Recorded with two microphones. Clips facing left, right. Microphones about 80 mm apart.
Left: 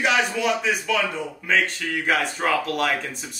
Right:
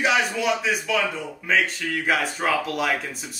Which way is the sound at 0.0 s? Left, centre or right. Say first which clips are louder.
Even; centre.